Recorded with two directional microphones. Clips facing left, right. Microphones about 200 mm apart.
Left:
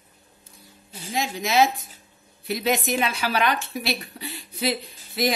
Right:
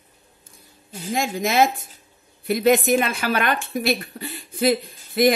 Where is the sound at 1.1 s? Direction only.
50° right (ahead or behind).